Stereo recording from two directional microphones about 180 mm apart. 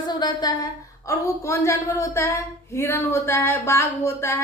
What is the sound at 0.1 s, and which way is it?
A woman's voice, 20° left (ahead or behind).